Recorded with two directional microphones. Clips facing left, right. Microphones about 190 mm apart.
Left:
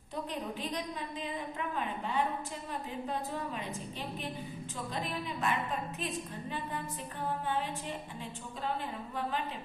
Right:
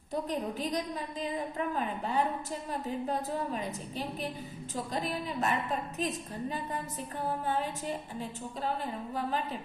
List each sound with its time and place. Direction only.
0.1 s a woman's voice: 40° right (ahead or behind)